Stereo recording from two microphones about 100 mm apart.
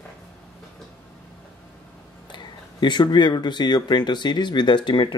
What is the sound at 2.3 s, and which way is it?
Speech, 50° left (ahead or behind).